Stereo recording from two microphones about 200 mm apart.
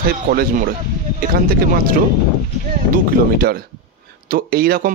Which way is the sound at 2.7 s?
45° right (ahead or behind).